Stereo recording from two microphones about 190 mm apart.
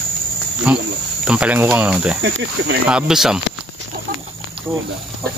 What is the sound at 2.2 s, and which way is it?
Speech, 70° right (ahead or behind).